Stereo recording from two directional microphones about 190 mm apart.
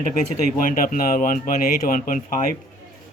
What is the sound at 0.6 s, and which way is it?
Speech, 45° left (ahead or behind).